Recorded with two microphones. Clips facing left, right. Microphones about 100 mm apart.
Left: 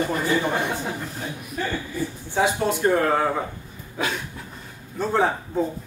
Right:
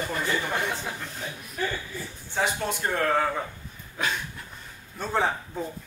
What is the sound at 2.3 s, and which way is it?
Speech, 15° left (ahead or behind).